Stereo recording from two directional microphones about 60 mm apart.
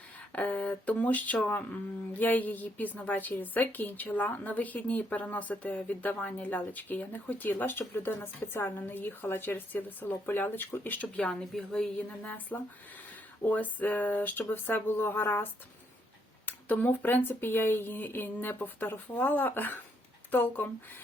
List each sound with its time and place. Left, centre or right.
0.3 s a woman's voice: left
11.5 s a woman's voice: centre
12.0 s a woman's voice: left
16.5 s speech: left